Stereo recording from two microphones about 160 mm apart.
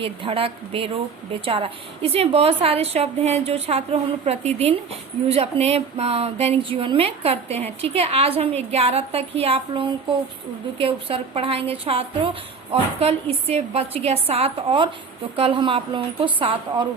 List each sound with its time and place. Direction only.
0.0 s a woman's voice: 35° right (ahead or behind)